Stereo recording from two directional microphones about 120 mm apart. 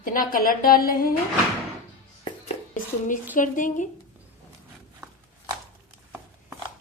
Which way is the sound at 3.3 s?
90° left.